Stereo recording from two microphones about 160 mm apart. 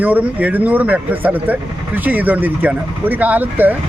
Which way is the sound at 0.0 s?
10° right (ahead or behind).